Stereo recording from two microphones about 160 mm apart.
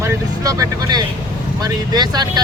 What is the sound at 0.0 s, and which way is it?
Speech, 20° right (ahead or behind).